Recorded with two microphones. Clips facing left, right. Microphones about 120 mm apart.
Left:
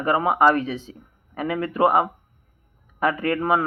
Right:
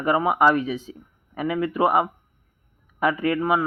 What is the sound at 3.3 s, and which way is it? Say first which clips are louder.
Speech: even; 30° left (ahead or behind).